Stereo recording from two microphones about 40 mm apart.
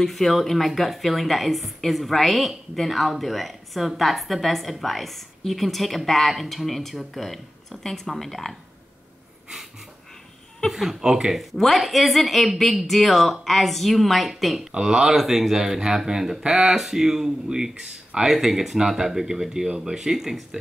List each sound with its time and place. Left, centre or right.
0.0 s a woman's voice: centre
10.7 s speech: centre
11.3 s a woman's voice: centre
14.8 s speech: centre